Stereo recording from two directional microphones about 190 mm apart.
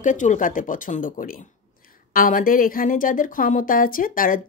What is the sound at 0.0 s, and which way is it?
Speech, 40° left (ahead or behind).